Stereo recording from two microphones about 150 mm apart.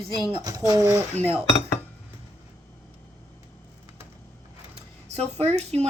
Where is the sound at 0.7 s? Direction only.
20° right (ahead or behind).